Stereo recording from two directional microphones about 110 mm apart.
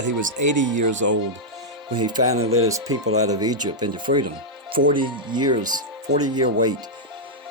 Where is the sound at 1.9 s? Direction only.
40° right (ahead or behind).